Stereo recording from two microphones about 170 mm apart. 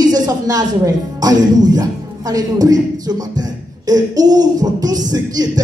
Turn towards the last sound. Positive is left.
turn(degrees=-20)  # may be behind; listen again after turning